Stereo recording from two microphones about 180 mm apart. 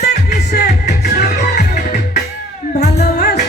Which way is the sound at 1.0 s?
65° left (ahead or behind).